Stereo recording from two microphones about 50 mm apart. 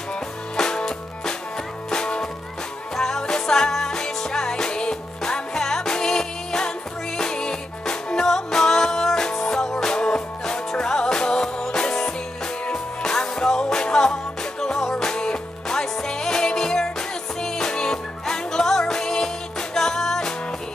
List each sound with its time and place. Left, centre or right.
0.6 s music: centre